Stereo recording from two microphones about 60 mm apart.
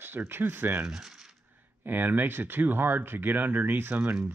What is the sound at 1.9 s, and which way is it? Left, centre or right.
Speech, right.